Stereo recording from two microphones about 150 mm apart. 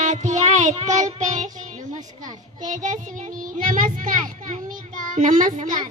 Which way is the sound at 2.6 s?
55° right (ahead or behind).